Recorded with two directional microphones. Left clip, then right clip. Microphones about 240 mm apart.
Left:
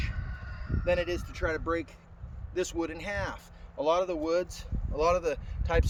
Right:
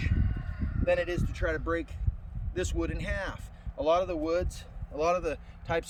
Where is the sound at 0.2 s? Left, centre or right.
Left.